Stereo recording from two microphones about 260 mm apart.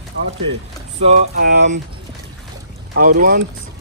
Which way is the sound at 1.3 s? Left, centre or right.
Right.